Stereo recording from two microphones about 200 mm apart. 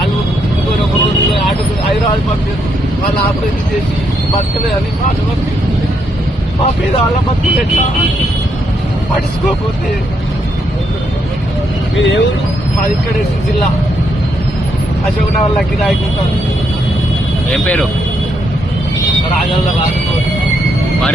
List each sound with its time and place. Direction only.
11.9 s speech: 65° left (ahead or behind)
17.5 s speech: centre (ahead or behind)